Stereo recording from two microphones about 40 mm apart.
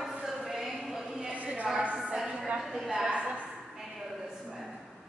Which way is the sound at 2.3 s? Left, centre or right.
Centre.